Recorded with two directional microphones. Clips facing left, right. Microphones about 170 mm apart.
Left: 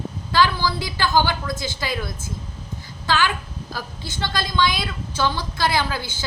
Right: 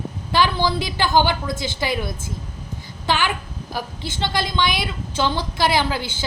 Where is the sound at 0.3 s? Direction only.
20° right (ahead or behind).